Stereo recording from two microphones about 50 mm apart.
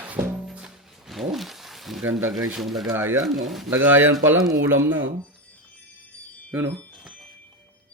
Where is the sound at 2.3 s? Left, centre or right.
Centre.